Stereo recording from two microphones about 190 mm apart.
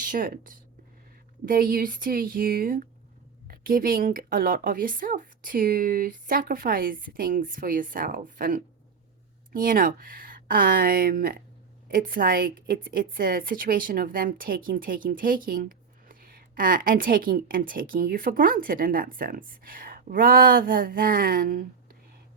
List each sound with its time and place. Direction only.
0.0 s a woman's voice: 45° right (ahead or behind)